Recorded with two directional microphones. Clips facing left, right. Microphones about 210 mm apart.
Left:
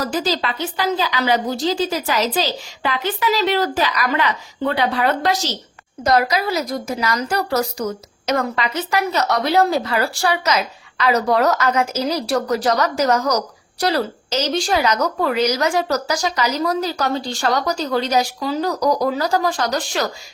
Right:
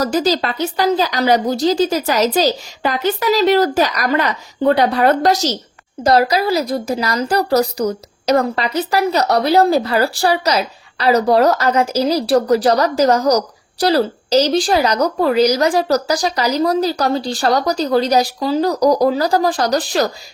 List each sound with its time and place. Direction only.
0.0 s a woman's voice: 40° right (ahead or behind)